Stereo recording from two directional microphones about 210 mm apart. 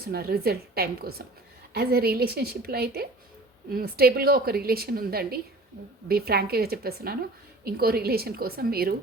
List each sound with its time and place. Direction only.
0.0 s a woman's voice: 45° right (ahead or behind)